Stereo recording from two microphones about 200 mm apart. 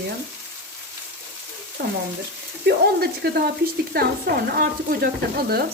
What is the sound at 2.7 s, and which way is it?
Speech, 55° right (ahead or behind).